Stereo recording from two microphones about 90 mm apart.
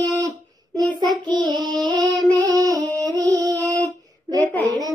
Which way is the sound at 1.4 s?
50° right (ahead or behind).